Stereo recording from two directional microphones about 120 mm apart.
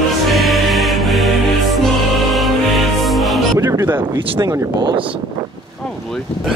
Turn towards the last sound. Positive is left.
turn(degrees=-30)  # may be behind; listen again after turning